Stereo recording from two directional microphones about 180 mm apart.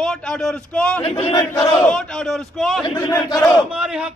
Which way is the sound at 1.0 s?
30° left (ahead or behind).